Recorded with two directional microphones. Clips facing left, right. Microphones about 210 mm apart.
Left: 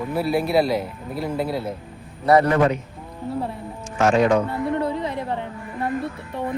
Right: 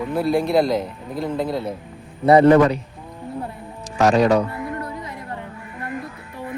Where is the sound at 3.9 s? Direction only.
35° right (ahead or behind).